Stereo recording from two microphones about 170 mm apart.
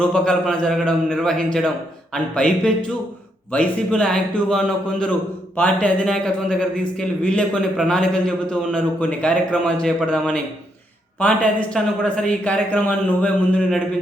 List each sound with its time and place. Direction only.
0.0 s a man's voice: 5° left (ahead or behind)